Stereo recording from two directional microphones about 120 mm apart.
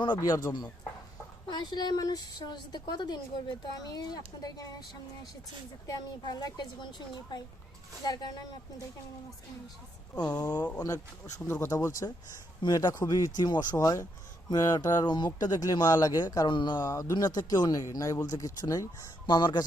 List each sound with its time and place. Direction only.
0.0 s speech: 35° left (ahead or behind)
5.9 s speech: 35° left (ahead or behind)
8.0 s speech: 35° left (ahead or behind)
10.3 s speech: 30° left (ahead or behind)
16.8 s speech: 25° left (ahead or behind)